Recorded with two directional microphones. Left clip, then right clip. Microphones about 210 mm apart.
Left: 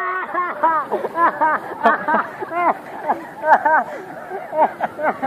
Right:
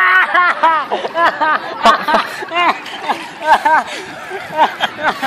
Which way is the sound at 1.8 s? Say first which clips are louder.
Right 5 dB; 40° right (ahead or behind).